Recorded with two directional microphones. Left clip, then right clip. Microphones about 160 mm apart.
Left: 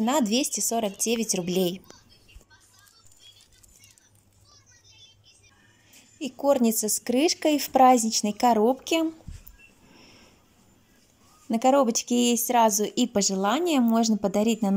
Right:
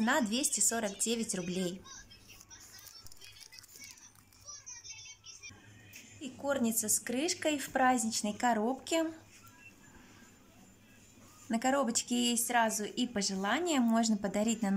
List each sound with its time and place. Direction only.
0.0 s a woman's voice: 20° left (ahead or behind)
6.1 s speech: 30° left (ahead or behind)
11.5 s speech: 20° left (ahead or behind)